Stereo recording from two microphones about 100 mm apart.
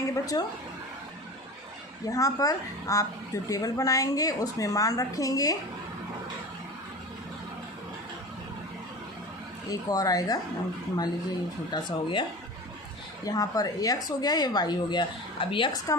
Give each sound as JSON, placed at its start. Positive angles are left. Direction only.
{"t": 0.1, "sound": "speech", "side_deg": 35}
{"t": 2.0, "sound": "speech", "side_deg": 35}
{"t": 9.6, "sound": "speech", "side_deg": 40}
{"t": 11.7, "sound": "speech", "side_deg": 50}
{"t": 13.2, "sound": "speech", "side_deg": 40}